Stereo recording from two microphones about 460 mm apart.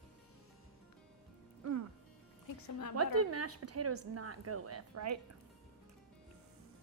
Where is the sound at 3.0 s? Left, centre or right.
Right.